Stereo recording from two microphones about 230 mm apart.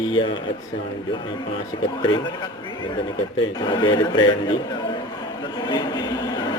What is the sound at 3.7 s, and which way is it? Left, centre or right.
A man's voice, centre.